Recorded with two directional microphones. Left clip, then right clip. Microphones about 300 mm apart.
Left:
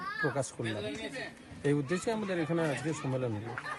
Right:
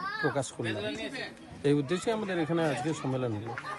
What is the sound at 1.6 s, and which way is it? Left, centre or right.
A man's voice, centre.